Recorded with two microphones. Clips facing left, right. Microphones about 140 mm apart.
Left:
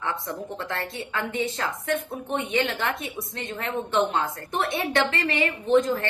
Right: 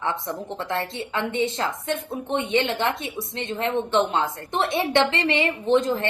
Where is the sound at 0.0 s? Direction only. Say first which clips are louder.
Right 3 dB; 20° right (ahead or behind).